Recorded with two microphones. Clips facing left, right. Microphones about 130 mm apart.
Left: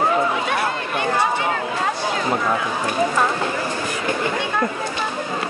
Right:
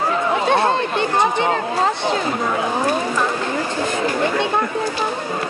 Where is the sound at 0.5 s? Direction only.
25° right (ahead or behind).